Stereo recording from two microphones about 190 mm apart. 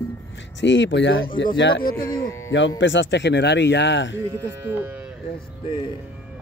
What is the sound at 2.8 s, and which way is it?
Speech, 75° left (ahead or behind).